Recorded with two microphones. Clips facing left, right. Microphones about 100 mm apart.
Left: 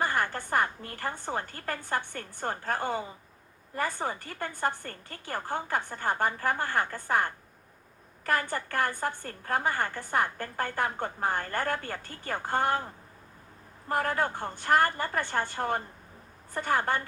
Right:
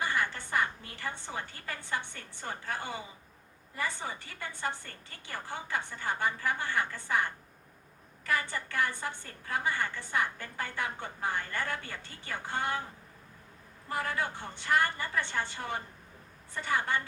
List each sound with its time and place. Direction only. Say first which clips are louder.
0.0 s a woman's voice: left 3 dB; 45° left (ahead or behind)
13.8 s a woman's voice: left 5 dB; 50° left (ahead or behind)